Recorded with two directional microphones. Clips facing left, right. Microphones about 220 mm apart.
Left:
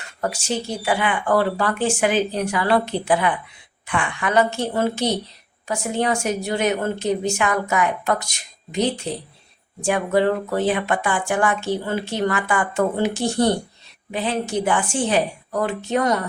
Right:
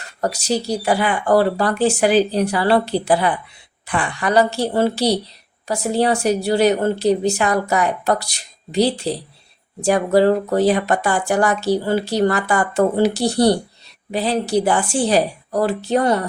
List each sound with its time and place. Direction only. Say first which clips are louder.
0.2 s a woman's voice: right 4 dB; 40° right (ahead or behind)